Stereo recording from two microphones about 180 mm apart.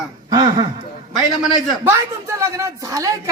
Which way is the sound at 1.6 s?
15° right (ahead or behind).